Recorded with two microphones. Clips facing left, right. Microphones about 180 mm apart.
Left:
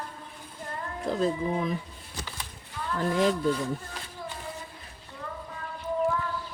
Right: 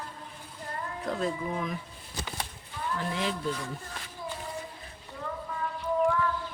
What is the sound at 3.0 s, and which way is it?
Speech, 45° left (ahead or behind).